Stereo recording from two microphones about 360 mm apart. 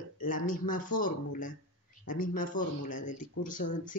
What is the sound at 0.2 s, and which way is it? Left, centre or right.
Speech, left.